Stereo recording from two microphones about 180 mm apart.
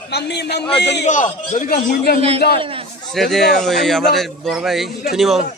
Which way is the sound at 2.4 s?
65° left (ahead or behind).